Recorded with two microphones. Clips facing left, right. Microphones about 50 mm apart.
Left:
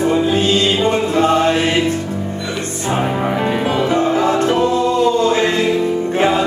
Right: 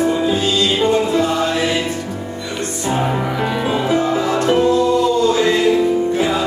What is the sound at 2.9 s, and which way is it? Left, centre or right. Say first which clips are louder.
Music: left 2 dB; left.